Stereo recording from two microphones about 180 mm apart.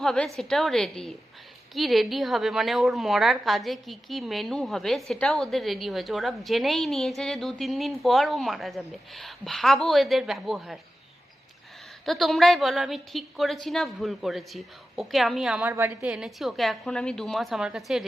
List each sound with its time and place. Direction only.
0.0 s a woman's voice: centre (ahead or behind)
12.0 s a woman's voice: centre (ahead or behind)